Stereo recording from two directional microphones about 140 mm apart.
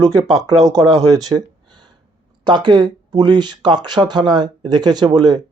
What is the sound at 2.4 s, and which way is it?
Speech, 30° right (ahead or behind).